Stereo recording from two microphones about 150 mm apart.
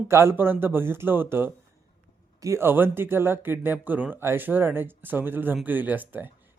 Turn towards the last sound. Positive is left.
turn(degrees=-10)  # may be behind; listen again after turning